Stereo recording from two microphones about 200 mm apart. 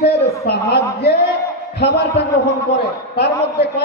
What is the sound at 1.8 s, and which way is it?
A man's voice, 55° left (ahead or behind).